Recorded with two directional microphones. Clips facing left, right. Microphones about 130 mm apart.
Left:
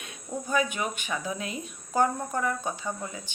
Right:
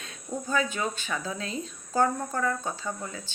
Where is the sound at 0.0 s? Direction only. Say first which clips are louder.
Right 1 dB; 15° left (ahead or behind).